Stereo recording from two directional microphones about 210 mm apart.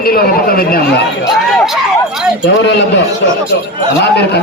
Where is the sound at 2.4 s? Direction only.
55° left (ahead or behind).